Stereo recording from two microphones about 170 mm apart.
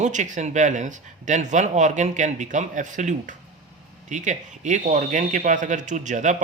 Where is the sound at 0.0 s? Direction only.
45° right (ahead or behind).